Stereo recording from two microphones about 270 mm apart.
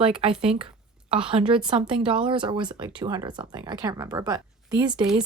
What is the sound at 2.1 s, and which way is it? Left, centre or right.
Speech, centre.